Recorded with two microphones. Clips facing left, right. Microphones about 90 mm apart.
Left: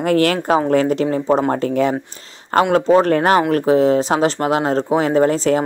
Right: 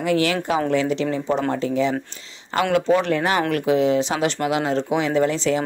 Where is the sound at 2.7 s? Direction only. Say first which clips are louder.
Left 4 dB; 40° left (ahead or behind).